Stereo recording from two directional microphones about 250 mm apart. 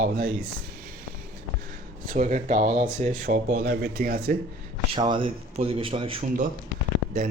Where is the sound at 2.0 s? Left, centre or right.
Right.